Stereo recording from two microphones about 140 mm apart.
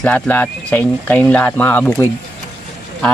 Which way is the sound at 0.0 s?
10° left (ahead or behind).